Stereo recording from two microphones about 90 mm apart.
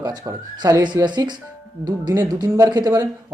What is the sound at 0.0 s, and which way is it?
Speech, 45° right (ahead or behind).